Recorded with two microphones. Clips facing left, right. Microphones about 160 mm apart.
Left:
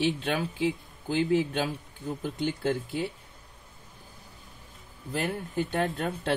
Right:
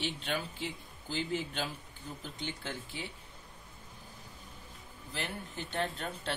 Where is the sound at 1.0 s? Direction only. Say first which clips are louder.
Left 10 dB; 60° left (ahead or behind).